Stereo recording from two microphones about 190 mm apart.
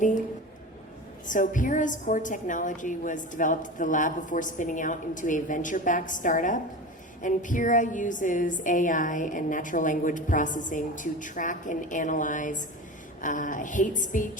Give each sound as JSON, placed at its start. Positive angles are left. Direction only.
{"t": 1.3, "sound": "a woman's voice", "side_deg": 45}